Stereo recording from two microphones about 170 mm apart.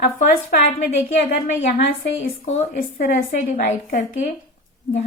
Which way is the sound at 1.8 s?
40° left (ahead or behind).